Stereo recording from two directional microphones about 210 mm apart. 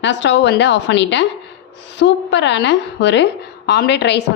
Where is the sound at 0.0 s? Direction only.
60° left (ahead or behind).